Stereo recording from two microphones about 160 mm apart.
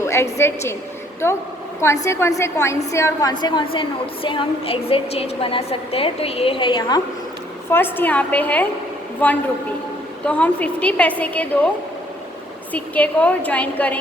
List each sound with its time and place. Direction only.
0.0 s a woman's voice: 15° left (ahead or behind)
2.0 s a woman's voice: 15° left (ahead or behind)
7.7 s a woman's voice: 15° left (ahead or behind)
12.7 s a woman's voice: 10° left (ahead or behind)